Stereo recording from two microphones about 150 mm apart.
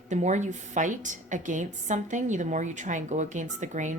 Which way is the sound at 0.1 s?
50° right (ahead or behind).